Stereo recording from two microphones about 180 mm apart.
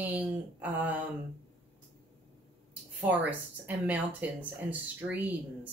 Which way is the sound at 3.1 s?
10° right (ahead or behind).